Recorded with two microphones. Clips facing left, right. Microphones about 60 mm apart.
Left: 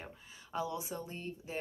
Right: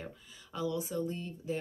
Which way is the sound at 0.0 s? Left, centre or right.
Left.